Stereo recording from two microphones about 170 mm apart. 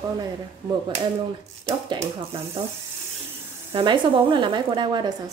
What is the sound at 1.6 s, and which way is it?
Speech, 25° right (ahead or behind).